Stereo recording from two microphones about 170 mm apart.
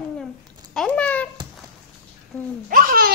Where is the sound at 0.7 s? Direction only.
10° left (ahead or behind).